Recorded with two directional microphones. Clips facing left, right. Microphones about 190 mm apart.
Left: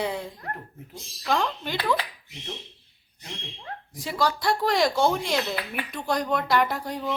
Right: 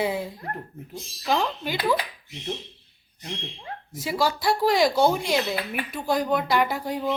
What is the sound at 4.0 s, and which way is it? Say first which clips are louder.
Speech: right 1 dB; 5° right (ahead or behind).